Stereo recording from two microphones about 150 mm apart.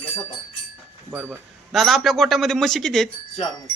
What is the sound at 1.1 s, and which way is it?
Speech, 10° right (ahead or behind).